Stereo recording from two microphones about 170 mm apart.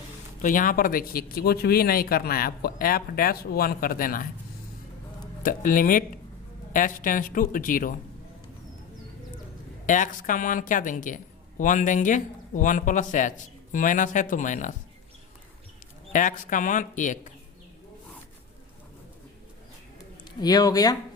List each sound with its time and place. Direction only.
0.4 s speech: 55° left (ahead or behind)
5.4 s a woman's voice: 55° left (ahead or behind)
9.8 s a woman's voice: 50° left (ahead or behind)
16.1 s a woman's voice: 50° left (ahead or behind)
20.4 s speech: 25° left (ahead or behind)